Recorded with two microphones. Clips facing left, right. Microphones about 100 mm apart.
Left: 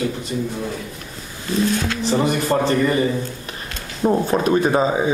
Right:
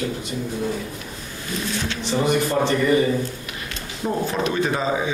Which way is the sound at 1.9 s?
40° left (ahead or behind).